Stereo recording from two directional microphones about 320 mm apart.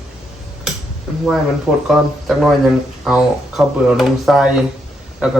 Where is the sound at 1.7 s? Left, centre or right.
Centre.